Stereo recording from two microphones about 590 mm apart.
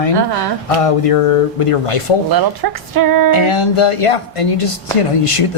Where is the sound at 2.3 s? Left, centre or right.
Right.